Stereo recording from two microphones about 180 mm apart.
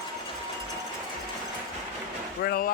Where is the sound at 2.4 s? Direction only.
55° left (ahead or behind).